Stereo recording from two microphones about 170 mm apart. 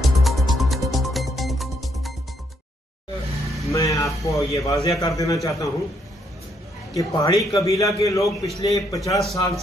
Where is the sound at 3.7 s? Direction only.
20° left (ahead or behind).